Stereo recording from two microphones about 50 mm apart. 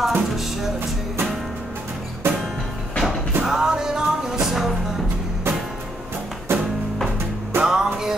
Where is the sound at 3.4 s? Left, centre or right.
Centre.